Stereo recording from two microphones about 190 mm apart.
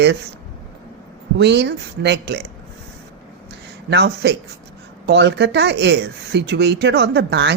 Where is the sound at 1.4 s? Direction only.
65° right (ahead or behind).